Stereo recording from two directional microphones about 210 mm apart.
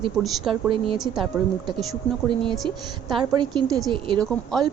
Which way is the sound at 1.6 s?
20° right (ahead or behind).